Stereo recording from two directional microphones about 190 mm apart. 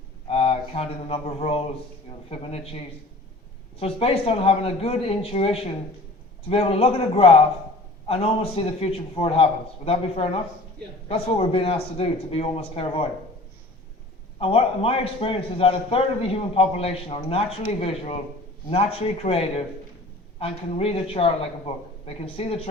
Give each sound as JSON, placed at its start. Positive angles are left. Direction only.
{"t": 0.3, "sound": "a man's voice", "side_deg": 30}
{"t": 14.3, "sound": "a man's voice", "side_deg": 30}